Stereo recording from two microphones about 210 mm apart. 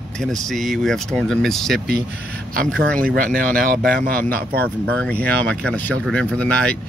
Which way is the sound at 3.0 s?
45° right (ahead or behind).